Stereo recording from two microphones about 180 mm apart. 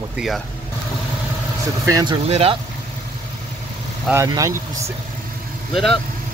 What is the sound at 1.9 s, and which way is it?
Speech, 20° right (ahead or behind).